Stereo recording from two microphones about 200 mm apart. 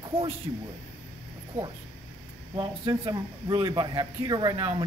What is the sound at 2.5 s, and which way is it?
Speech, 20° right (ahead or behind).